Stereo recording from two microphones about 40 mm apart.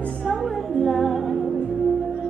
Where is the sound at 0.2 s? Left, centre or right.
Centre.